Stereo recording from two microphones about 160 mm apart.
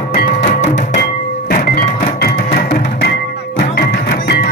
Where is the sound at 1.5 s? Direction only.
65° left (ahead or behind).